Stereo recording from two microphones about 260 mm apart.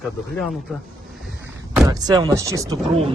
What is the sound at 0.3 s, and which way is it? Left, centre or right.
Speech, centre.